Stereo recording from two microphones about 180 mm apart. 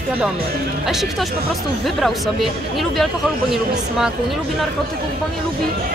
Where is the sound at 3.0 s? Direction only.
5° right (ahead or behind).